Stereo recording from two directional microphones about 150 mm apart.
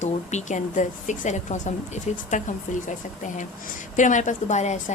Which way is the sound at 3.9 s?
55° left (ahead or behind).